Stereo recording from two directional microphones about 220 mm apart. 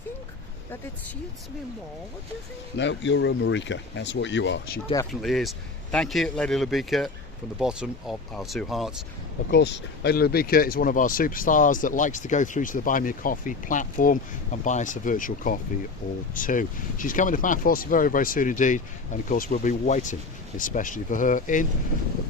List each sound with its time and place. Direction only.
2.7 s speech: 55° left (ahead or behind)
5.2 s speech: centre (ahead or behind)
9.5 s speech: 50° left (ahead or behind)